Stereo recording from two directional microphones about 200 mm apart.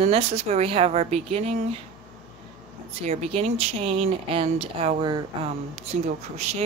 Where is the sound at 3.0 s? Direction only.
30° right (ahead or behind).